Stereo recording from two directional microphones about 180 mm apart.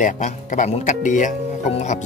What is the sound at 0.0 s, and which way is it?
Speech, 40° left (ahead or behind).